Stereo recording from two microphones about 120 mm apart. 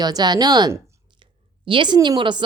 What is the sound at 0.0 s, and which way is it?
A woman's voice, 35° right (ahead or behind).